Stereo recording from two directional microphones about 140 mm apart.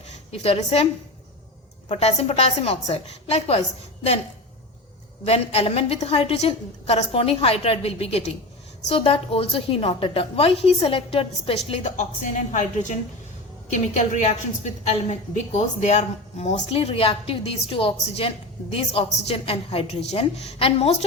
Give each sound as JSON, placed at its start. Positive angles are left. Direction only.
{"t": 0.3, "sound": "a woman's voice", "side_deg": 45}
{"t": 1.9, "sound": "a woman's voice", "side_deg": 50}
{"t": 5.2, "sound": "a woman's voice", "side_deg": 45}